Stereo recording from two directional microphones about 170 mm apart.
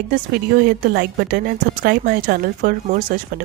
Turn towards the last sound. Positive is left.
turn(degrees=-55)  # may be behind; listen again after turning